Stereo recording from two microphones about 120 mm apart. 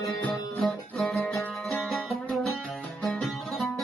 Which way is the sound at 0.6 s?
5° left (ahead or behind).